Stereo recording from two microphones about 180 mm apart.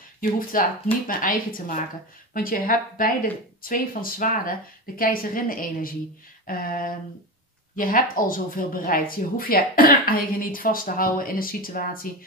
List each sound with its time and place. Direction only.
0.2 s speech: 50° left (ahead or behind)